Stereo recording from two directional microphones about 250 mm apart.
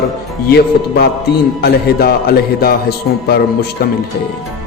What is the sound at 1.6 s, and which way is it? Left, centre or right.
Speech, left.